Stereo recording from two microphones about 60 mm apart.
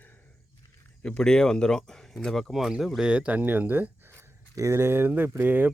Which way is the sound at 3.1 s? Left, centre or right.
Right.